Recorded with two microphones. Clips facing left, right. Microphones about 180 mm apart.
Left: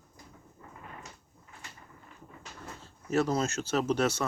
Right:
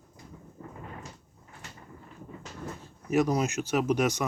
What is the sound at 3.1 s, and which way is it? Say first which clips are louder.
Speech: right 2 dB; 15° right (ahead or behind).